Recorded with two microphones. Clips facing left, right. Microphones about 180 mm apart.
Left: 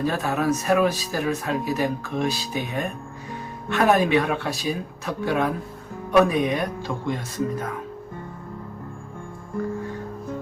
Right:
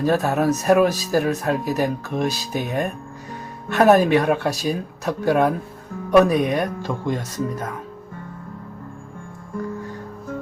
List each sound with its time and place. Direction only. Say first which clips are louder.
0.0 s speech: right 4 dB; 45° right (ahead or behind)